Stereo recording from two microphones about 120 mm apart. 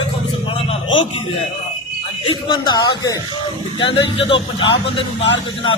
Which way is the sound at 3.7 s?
45° left (ahead or behind).